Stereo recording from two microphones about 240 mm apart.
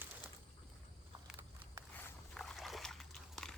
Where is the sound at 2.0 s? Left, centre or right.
Centre.